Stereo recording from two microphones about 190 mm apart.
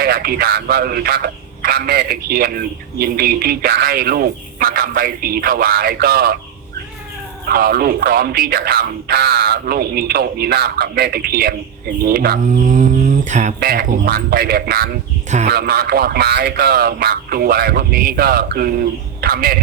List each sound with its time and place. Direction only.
0.0 s speech: 55° right (ahead or behind)
7.4 s speech: 50° right (ahead or behind)